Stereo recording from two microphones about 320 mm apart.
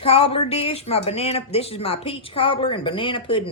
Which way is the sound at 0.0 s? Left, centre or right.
Centre.